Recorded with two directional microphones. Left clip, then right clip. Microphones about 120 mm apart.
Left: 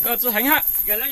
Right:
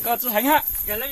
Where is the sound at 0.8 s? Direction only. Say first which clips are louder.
Left 1 dB; centre (ahead or behind).